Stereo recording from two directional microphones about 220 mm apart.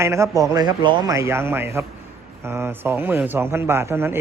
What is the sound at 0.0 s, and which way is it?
Speech, 15° right (ahead or behind).